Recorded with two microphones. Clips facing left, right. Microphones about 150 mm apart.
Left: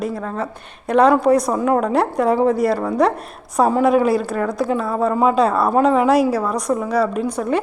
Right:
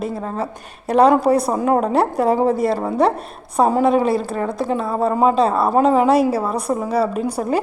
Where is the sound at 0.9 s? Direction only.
35° right (ahead or behind).